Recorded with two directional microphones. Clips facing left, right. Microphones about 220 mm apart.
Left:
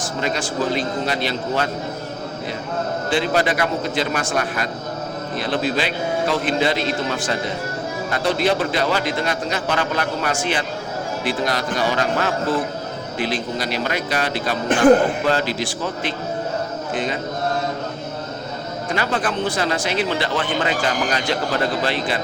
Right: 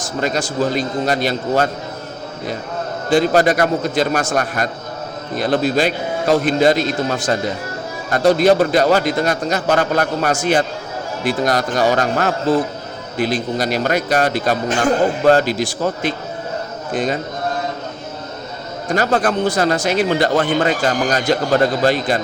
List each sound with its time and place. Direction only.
0.2 s a man's voice: 40° right (ahead or behind)
3.1 s a man's voice: 40° right (ahead or behind)
18.9 s a man's voice: 40° right (ahead or behind)